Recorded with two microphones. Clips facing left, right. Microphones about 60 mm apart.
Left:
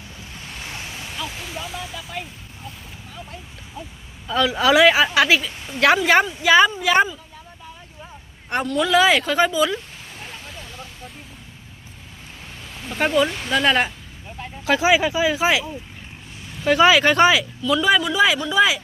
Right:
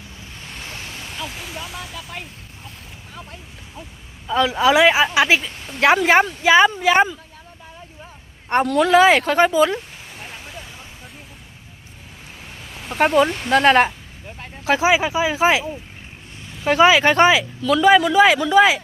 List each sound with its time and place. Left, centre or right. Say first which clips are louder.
0.4 s waves: even; centre
4.3 s speech: right 1 dB; centre
5.5 s speech: left 1 dB; centre
5.8 s speech: right 1 dB; right
8.8 s speech: right 3 dB; right
10.2 s a sound: right 1 dB; centre
12.7 s a sound: right 1 dB; centre
13.2 s speech: right 2 dB; centre
13.5 s speech: right 7 dB; right
14.6 s speech: right 1 dB; right
15.4 s speech: right 3 dB; right
17.6 s speech: right 2 dB; right
17.8 s speech: right 6 dB; right
18.3 s speech: right 6 dB; right